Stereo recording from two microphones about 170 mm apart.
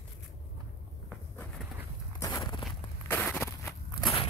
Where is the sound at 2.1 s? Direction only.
20° left (ahead or behind).